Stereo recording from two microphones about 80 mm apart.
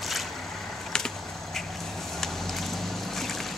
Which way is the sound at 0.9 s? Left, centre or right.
Centre.